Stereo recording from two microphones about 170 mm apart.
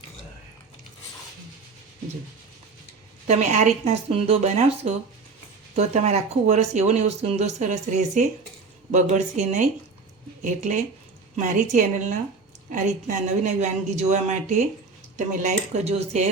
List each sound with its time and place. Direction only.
3.2 s speech: 45° right (ahead or behind)